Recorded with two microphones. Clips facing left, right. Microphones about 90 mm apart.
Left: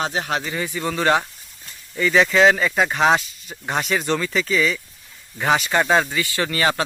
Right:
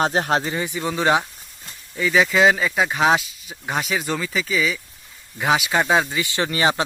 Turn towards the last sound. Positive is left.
turn(degrees=-20)  # may be behind; listen again after turning